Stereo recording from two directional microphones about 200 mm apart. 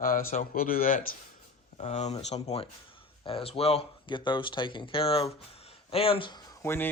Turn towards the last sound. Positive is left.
turn(degrees=15)  # may be behind; listen again after turning